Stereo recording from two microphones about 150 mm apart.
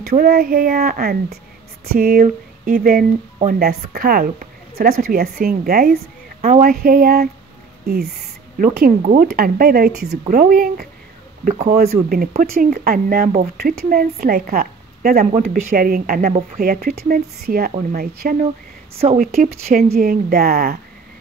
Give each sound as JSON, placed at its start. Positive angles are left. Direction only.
{"t": 0.0, "sound": "a woman's voice", "side_deg": -75}
{"t": 6.4, "sound": "speech", "side_deg": -50}
{"t": 6.7, "sound": "a woman's voice", "side_deg": -75}
{"t": 9.0, "sound": "speech", "side_deg": -65}
{"t": 10.3, "sound": "a woman's voice", "side_deg": -75}
{"t": 11.4, "sound": "speech", "side_deg": -45}
{"t": 11.7, "sound": "speech", "side_deg": -80}
{"t": 12.4, "sound": "a woman's voice", "side_deg": -65}
{"t": 19.0, "sound": "speech", "side_deg": -40}
{"t": 19.7, "sound": "speech", "side_deg": -80}